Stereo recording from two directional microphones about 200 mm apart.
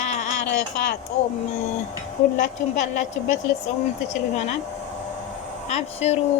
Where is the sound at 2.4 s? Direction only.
35° left (ahead or behind).